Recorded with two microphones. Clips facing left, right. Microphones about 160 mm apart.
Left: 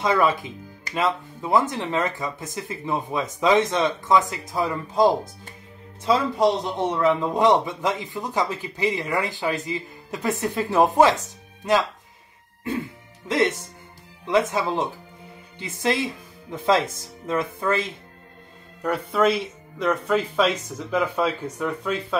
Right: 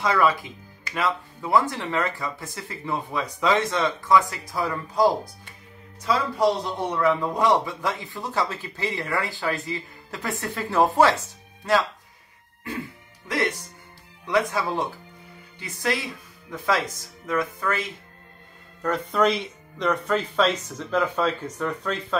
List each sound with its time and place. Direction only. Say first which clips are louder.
0.0 s a man's voice: left 1 dB; 20° left (ahead or behind)
13.3 s a man's voice: left 4 dB; 25° left (ahead or behind)
18.8 s speech: left 1 dB; 10° left (ahead or behind)